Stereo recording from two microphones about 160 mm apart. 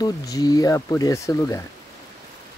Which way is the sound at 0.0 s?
25° left (ahead or behind).